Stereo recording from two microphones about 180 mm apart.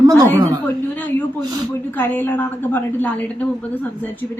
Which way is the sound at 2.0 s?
10° left (ahead or behind).